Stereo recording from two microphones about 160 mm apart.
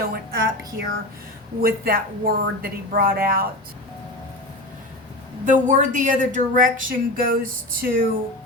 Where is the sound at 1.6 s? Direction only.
70° right (ahead or behind).